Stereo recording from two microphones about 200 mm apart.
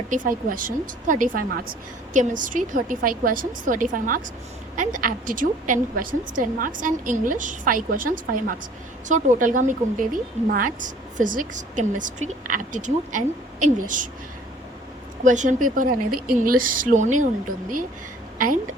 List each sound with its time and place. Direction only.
0.1 s a woman's voice: 45° right (ahead or behind)
15.2 s a woman's voice: 40° right (ahead or behind)
18.3 s a woman's voice: 45° right (ahead or behind)